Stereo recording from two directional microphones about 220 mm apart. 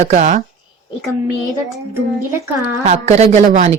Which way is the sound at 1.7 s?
10° right (ahead or behind).